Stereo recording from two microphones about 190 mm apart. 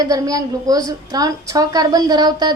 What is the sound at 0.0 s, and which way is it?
A woman's voice, 20° right (ahead or behind).